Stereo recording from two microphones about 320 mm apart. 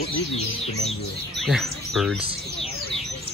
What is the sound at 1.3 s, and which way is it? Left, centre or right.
Speech, centre.